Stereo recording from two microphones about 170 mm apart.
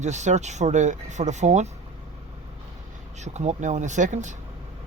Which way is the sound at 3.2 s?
40° right (ahead or behind).